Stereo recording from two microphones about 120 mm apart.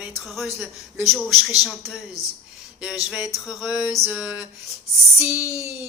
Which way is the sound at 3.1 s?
5° right (ahead or behind).